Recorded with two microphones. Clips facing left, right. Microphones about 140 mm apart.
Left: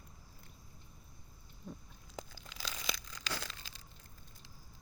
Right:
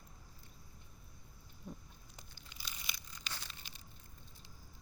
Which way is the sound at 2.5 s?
90° left.